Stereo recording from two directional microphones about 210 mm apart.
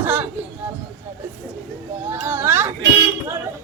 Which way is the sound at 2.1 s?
10° right (ahead or behind).